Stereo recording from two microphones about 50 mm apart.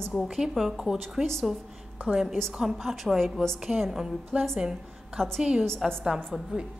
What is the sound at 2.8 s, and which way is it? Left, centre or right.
A woman's voice, centre.